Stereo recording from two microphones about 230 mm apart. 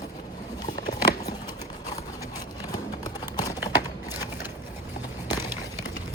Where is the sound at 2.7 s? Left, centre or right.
Centre.